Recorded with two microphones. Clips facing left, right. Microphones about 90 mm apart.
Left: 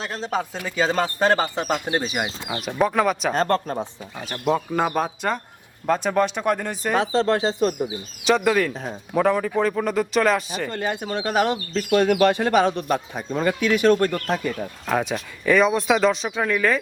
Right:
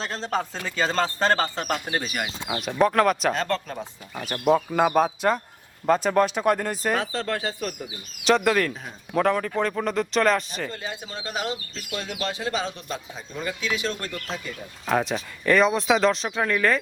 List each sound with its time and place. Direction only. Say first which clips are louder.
0.0 s speech: left 1 dB; 10° left (ahead or behind)
2.5 s speech: right 2 dB; centre (ahead or behind)
3.3 s speech: left 6 dB; 40° left (ahead or behind)
4.3 s speech: right 2 dB; 5° right (ahead or behind)
6.9 s speech: left 6 dB; 20° left (ahead or behind)
8.2 s speech: left 1 dB; centre (ahead or behind)
8.7 s speech: left 7 dB; 30° left (ahead or behind)
9.1 s speech: left 2 dB; 5° left (ahead or behind)
10.7 s speech: left 8 dB; 60° left (ahead or behind)
14.8 s speech: even; centre (ahead or behind)